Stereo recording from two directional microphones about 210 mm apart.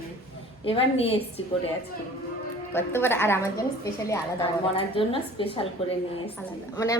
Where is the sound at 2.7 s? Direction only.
10° left (ahead or behind).